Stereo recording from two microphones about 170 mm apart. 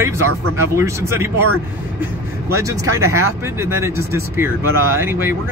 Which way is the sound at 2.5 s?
15° right (ahead or behind).